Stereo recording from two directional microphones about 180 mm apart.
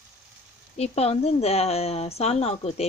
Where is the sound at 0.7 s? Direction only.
35° left (ahead or behind).